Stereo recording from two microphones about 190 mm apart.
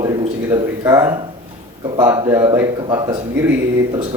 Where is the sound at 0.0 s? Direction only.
15° right (ahead or behind).